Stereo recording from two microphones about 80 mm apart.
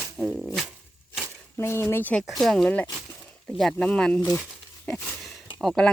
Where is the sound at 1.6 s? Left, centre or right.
Left.